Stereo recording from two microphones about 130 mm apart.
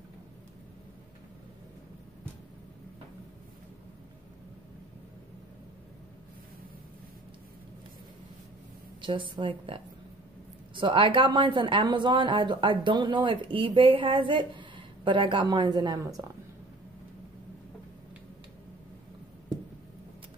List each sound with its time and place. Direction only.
9.0 s speech: 40° right (ahead or behind)
16.0 s a woman's voice: 25° right (ahead or behind)